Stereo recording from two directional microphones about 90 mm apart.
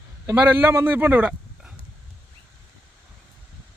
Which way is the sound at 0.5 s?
25° right (ahead or behind).